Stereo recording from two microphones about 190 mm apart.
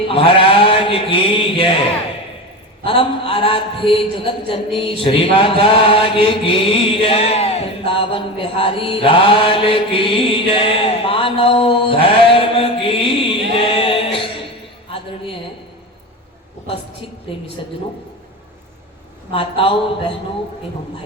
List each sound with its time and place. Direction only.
0.1 s speech: 30° left (ahead or behind)
2.8 s a man's voice: 30° left (ahead or behind)
4.9 s chant: 30° left (ahead or behind)
14.8 s a sound: 30° left (ahead or behind)
17.6 s a man's voice: 25° left (ahead or behind)
19.3 s a man's voice: 30° left (ahead or behind)